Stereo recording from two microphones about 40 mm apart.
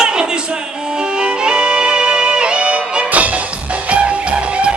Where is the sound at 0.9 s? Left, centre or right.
Centre.